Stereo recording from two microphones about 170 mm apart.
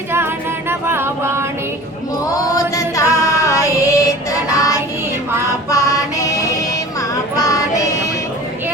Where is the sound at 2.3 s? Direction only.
20° left (ahead or behind).